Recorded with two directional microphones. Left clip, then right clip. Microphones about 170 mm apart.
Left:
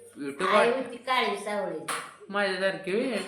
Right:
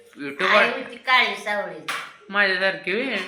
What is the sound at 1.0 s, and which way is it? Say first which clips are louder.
Speech: right 9 dB; 15° left (ahead or behind).